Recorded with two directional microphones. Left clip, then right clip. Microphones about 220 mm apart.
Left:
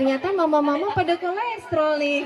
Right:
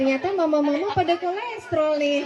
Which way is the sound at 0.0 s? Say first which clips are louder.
Left 1 dB; 25° left (ahead or behind).